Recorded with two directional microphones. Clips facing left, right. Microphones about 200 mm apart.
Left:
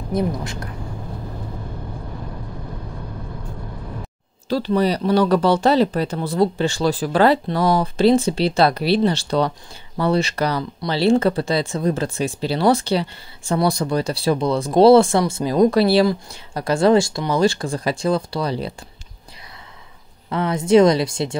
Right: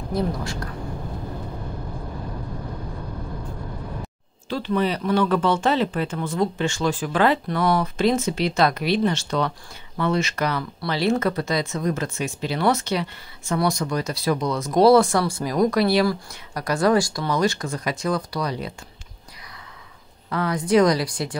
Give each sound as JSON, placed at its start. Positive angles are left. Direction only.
{"t": 0.1, "sound": "speech", "side_deg": 20}
{"t": 4.5, "sound": "speech", "side_deg": 35}
{"t": 20.2, "sound": "speech", "side_deg": 25}